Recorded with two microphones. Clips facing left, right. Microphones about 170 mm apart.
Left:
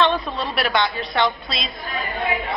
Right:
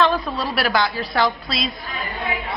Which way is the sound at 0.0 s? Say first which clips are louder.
Right 1 dB; centre (ahead or behind).